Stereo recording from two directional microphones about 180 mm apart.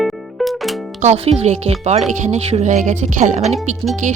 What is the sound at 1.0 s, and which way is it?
Speech, 35° right (ahead or behind).